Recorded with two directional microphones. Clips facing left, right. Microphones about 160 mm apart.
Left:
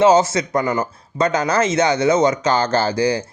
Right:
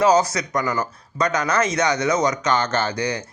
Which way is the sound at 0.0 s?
25° left (ahead or behind).